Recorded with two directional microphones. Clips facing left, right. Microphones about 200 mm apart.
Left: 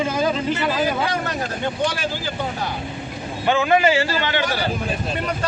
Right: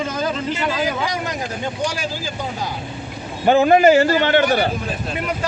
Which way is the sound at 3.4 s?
40° right (ahead or behind).